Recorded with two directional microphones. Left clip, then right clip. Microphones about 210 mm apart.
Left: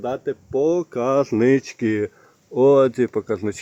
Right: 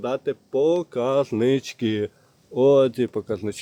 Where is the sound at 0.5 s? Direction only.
25° left (ahead or behind).